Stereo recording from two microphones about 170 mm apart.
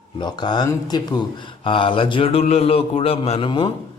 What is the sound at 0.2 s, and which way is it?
A man's voice, 25° left (ahead or behind).